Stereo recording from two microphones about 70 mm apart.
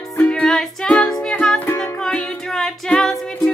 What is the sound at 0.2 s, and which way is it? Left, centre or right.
Music, centre.